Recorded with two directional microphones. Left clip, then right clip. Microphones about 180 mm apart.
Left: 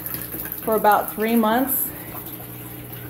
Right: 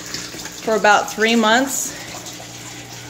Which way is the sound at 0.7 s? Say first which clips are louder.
Right 3 dB; 25° right (ahead or behind).